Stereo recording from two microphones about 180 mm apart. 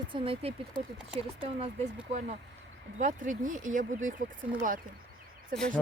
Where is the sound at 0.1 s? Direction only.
30° right (ahead or behind).